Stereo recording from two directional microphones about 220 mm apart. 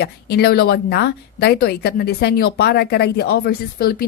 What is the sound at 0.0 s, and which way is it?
Speech, 50° left (ahead or behind).